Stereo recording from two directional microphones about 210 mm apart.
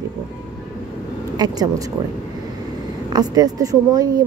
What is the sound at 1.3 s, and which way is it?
Speech, 20° right (ahead or behind).